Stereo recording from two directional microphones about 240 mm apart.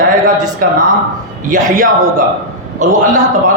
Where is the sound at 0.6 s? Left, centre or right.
Right.